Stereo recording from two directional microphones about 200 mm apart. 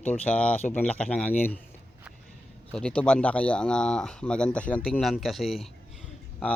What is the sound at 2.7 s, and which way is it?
A man's voice, 5° left (ahead or behind).